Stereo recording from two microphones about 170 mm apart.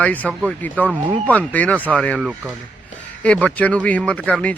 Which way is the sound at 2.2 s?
10° right (ahead or behind).